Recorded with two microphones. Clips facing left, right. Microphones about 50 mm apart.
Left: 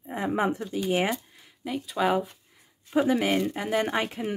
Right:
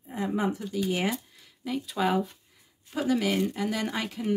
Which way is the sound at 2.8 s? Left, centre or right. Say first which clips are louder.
Left 3 dB; left.